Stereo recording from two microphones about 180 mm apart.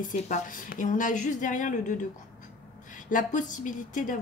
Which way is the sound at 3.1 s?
45° left (ahead or behind).